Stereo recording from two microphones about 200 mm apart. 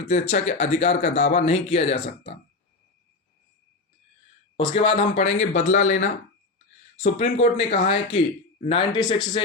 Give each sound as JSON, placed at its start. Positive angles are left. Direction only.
{"t": 0.1, "sound": "speech", "side_deg": 35}
{"t": 4.5, "sound": "speech", "side_deg": 25}